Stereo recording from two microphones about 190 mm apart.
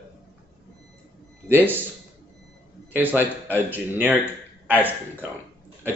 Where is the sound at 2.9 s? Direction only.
10° right (ahead or behind).